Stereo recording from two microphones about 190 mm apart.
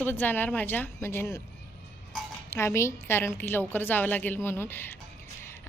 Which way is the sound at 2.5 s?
15° left (ahead or behind).